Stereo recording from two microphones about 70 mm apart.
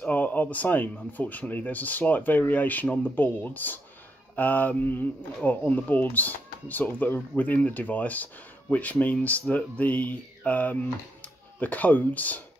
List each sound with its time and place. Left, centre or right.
0.0 s speech: left